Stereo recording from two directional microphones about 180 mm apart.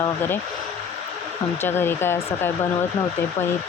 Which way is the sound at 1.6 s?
10° left (ahead or behind).